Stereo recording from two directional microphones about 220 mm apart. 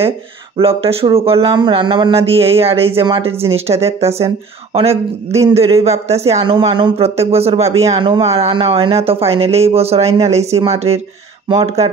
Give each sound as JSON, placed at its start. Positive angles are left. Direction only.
{"t": 0.6, "sound": "speech", "side_deg": -25}
{"t": 5.5, "sound": "speech", "side_deg": -25}